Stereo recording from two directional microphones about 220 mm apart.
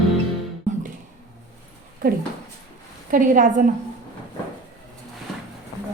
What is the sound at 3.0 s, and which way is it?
Speech, 40° right (ahead or behind).